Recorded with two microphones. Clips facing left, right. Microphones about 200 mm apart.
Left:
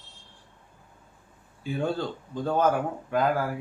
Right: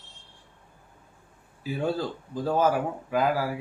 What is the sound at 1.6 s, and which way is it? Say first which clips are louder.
Speech: even; 5° right (ahead or behind).